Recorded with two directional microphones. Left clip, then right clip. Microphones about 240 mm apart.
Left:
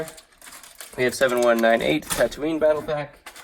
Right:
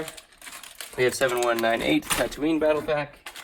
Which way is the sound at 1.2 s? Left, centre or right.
Right.